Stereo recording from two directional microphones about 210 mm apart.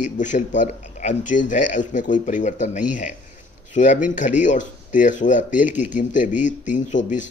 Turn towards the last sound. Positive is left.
turn(degrees=35)  # may be behind; listen again after turning